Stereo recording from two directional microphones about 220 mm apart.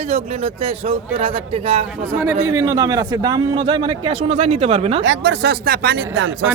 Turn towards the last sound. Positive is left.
turn(degrees=-60)  # may be behind; listen again after turning